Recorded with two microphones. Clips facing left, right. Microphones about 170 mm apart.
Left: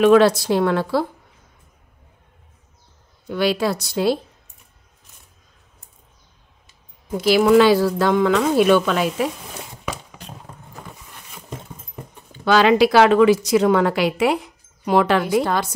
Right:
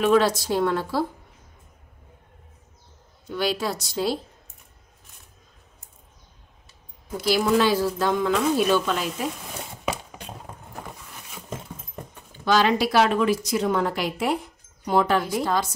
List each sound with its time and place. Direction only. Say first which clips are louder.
0.0 s speech: left 6 dB; 75° left (ahead or behind)
3.3 s speech: left 6 dB; 65° left (ahead or behind)
7.2 s speech: left 7 dB; 80° left
12.4 s a woman's voice: left 6 dB; 80° left; by 15.7 s 65° left (ahead or behind)